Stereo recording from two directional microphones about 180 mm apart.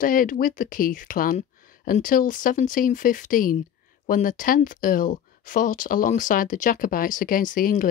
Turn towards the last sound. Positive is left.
turn(degrees=50)  # may be behind; listen again after turning